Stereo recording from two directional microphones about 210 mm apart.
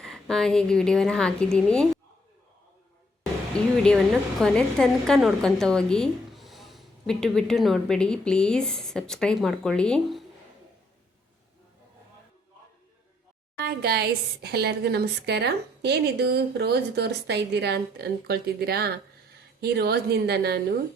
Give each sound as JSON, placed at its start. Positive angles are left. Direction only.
{"t": 0.0, "sound": "speech", "side_deg": 5}
{"t": 3.8, "sound": "speech", "side_deg": 0}
{"t": 13.6, "sound": "a woman's voice", "side_deg": -50}